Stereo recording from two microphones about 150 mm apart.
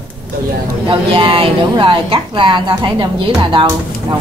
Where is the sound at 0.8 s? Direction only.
35° right (ahead or behind).